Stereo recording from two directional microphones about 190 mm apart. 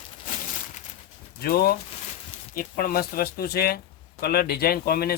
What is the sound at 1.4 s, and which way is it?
Speech, 50° left (ahead or behind).